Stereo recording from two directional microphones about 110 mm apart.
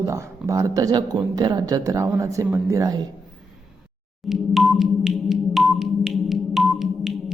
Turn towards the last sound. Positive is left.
turn(degrees=0)  # may be behind; listen again after turning